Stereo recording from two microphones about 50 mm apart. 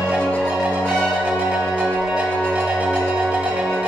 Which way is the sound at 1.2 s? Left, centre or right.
Right.